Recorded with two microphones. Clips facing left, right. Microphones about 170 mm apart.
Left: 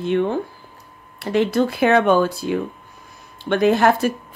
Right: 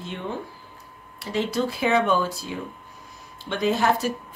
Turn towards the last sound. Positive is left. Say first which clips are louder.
# left 6 dB
turn(degrees=60)  # may be behind; listen again after turning